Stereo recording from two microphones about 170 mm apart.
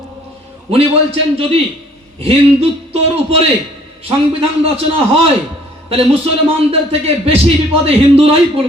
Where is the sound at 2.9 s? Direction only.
35° right (ahead or behind).